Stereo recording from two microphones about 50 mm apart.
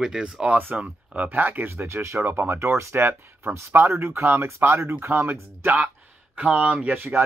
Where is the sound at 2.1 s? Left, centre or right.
Right.